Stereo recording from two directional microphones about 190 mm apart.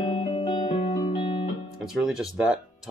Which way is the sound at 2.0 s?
5° right (ahead or behind).